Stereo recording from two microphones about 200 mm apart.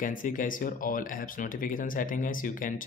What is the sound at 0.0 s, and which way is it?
Speech, 40° left (ahead or behind).